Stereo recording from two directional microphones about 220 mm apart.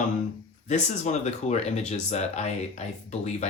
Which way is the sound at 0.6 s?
30° left (ahead or behind).